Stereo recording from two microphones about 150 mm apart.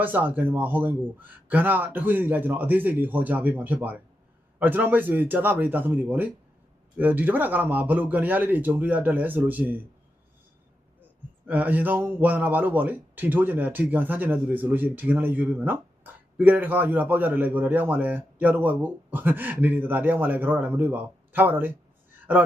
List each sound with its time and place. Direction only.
0.0 s a man's voice: 10° right (ahead or behind)
11.4 s a man's voice: 10° right (ahead or behind)